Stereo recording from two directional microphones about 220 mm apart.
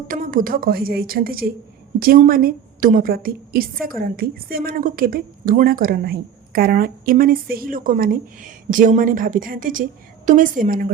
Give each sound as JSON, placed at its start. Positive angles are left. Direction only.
{"t": 0.1, "sound": "a woman's voice", "side_deg": -40}